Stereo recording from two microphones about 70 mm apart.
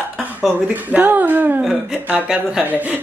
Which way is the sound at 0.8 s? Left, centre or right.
Right.